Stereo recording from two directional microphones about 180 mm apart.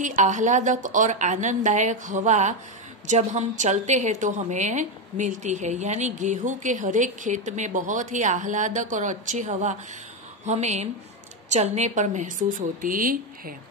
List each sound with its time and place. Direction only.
0.0 s a woman's voice: 45° right (ahead or behind)